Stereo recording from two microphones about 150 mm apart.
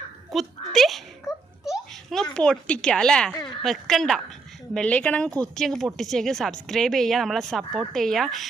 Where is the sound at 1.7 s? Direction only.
Centre (ahead or behind).